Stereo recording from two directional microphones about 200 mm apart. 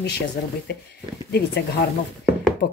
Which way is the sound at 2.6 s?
50° left (ahead or behind).